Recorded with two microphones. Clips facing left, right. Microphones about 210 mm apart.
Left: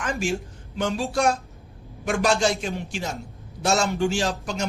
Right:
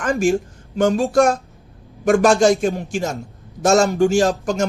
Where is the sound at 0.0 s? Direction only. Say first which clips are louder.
Right 9 dB; 45° right (ahead or behind).